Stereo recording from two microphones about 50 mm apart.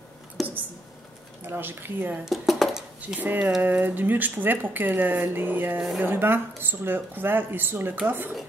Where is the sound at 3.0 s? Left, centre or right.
Right.